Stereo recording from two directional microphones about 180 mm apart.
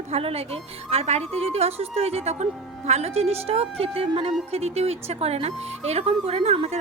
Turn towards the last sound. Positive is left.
turn(degrees=-35)  # may be behind; listen again after turning